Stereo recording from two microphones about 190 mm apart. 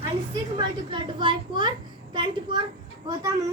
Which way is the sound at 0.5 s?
25° right (ahead or behind).